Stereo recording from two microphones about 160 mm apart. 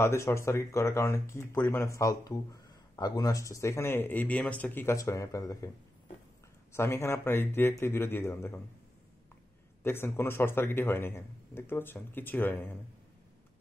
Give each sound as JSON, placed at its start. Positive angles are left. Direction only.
{"t": 0.0, "sound": "speech", "side_deg": 15}
{"t": 6.7, "sound": "speech", "side_deg": 15}
{"t": 9.8, "sound": "speech", "side_deg": 15}